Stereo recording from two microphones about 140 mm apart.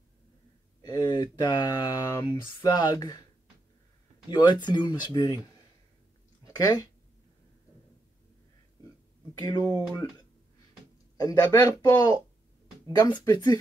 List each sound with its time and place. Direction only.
0.8 s speech: 30° left (ahead or behind)
4.3 s speech: 30° left (ahead or behind)
6.4 s speech: 25° left (ahead or behind)
9.4 s speech: 25° left (ahead or behind)
11.1 s speech: 30° left (ahead or behind)
13.2 s speech: 30° left (ahead or behind)